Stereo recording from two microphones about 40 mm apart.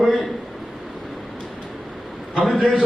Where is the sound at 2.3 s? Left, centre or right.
Centre.